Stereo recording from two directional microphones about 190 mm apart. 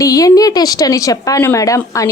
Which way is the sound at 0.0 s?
20° left (ahead or behind).